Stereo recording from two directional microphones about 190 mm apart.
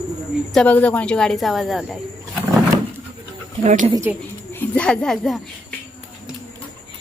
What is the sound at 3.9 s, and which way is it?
Speech, 15° right (ahead or behind).